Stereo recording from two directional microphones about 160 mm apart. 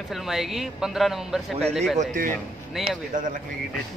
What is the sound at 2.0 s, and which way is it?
Speech, 60° right (ahead or behind).